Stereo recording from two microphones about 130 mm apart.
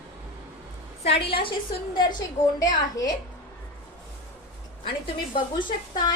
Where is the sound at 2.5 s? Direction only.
25° left (ahead or behind).